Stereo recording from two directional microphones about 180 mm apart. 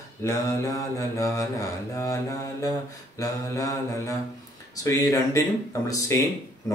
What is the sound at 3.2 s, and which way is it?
Mantra, 20° left (ahead or behind).